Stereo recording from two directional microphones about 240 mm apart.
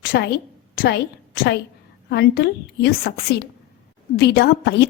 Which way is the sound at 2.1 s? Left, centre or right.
Left.